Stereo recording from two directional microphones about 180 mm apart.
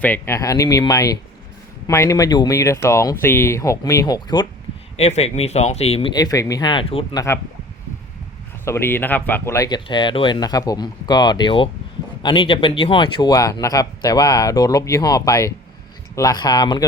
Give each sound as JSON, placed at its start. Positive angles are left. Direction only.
{"t": 0.0, "sound": "speech", "side_deg": 15}
{"t": 4.9, "sound": "speech", "side_deg": 35}
{"t": 8.6, "sound": "speech", "side_deg": 15}